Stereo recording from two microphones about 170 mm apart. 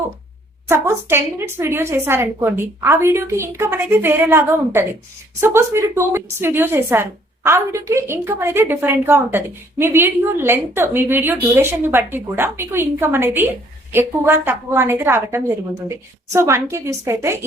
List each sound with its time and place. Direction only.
0.7 s a woman's voice: 15° right (ahead or behind)